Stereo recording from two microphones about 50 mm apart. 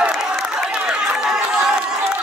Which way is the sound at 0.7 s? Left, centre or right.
Centre.